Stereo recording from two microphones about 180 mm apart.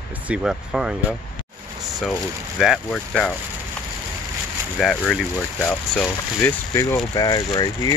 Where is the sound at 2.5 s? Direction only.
Centre (ahead or behind).